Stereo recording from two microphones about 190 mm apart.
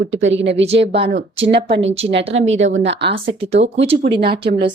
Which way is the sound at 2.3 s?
90° right.